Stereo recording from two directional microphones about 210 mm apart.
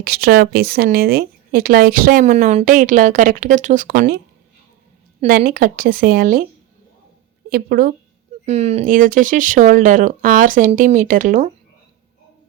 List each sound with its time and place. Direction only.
0.0 s speech: 45° right (ahead or behind)
5.5 s speech: 40° right (ahead or behind)
7.5 s speech: 45° right (ahead or behind)
8.4 s speech: 30° right (ahead or behind)